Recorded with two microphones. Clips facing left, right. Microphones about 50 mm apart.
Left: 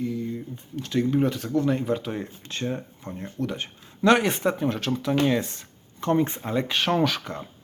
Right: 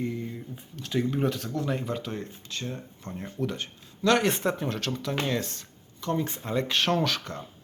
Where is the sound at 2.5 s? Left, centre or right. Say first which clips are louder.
Left 7 dB; left.